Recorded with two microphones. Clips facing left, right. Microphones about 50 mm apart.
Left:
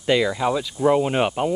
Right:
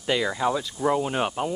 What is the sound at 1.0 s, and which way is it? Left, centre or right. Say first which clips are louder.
Speech: left 5 dB; left.